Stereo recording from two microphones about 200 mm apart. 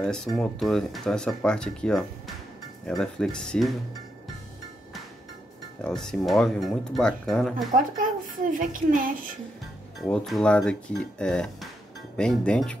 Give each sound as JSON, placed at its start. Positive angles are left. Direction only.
{"t": 0.0, "sound": "speech", "side_deg": 5}
{"t": 5.9, "sound": "speech", "side_deg": 5}
{"t": 7.7, "sound": "a woman's voice", "side_deg": -45}
{"t": 9.9, "sound": "speech", "side_deg": 0}